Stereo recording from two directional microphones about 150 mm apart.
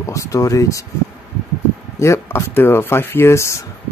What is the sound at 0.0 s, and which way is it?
Speech, 20° left (ahead or behind).